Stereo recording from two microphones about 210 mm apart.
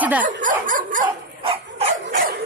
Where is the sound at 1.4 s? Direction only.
25° right (ahead or behind).